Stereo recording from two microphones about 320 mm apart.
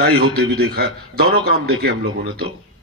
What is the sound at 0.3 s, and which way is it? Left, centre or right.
A man's voice, right.